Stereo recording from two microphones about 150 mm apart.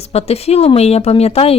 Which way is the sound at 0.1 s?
45° left (ahead or behind).